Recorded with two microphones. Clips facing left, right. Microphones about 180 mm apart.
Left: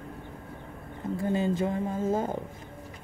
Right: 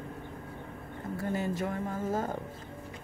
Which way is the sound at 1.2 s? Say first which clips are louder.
Left 5 dB; 25° left (ahead or behind).